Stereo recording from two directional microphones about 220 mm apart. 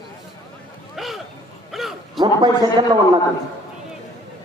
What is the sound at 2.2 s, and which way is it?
A man's voice, 20° right (ahead or behind).